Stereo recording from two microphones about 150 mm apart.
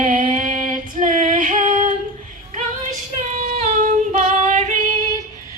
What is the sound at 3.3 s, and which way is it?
Child singing, 50° right (ahead or behind).